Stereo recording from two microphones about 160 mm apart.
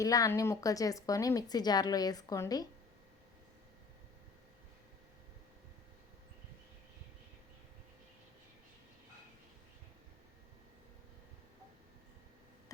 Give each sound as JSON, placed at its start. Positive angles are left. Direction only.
{"t": 0.0, "sound": "a woman's voice", "side_deg": 20}